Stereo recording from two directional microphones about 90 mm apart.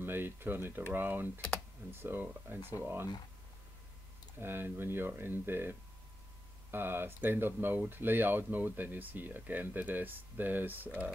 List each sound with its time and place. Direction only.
0.0 s speech: 25° right (ahead or behind)
4.4 s speech: 25° right (ahead or behind)